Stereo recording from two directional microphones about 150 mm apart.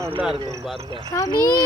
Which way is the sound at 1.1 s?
25° left (ahead or behind).